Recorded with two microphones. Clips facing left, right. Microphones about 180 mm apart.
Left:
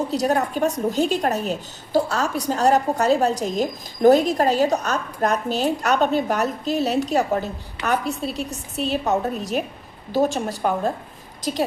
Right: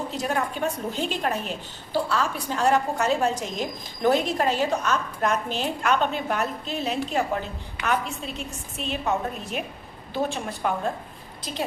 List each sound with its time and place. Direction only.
0.1 s a woman's voice: 40° left (ahead or behind)